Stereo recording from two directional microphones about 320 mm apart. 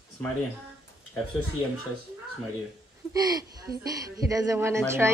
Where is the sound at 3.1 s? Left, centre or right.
Centre.